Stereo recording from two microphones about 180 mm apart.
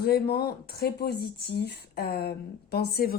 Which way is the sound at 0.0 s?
60° left (ahead or behind).